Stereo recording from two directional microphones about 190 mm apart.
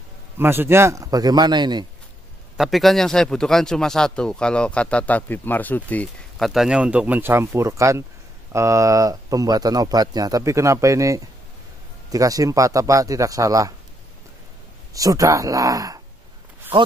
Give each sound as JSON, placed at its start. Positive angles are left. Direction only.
{"t": 0.4, "sound": "speech", "side_deg": -10}
{"t": 2.5, "sound": "speech", "side_deg": 0}
{"t": 15.0, "sound": "speech", "side_deg": -20}